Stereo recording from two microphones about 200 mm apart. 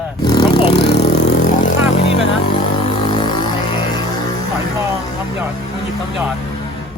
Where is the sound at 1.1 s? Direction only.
35° left (ahead or behind).